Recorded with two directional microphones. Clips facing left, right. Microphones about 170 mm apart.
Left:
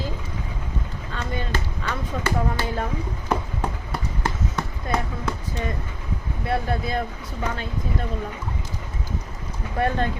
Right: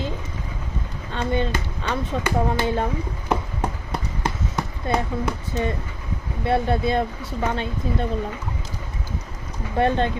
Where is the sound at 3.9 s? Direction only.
15° right (ahead or behind).